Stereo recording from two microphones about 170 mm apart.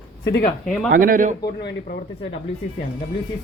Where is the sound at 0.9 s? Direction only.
55° right (ahead or behind).